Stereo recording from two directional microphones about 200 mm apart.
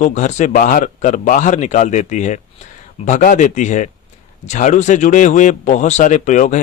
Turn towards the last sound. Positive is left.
turn(degrees=40)  # may be behind; listen again after turning